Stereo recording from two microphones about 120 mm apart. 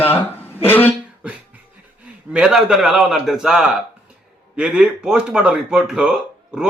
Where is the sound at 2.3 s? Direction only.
5° right (ahead or behind).